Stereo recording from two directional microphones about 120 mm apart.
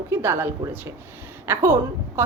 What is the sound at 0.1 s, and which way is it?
A woman's voice, 20° right (ahead or behind).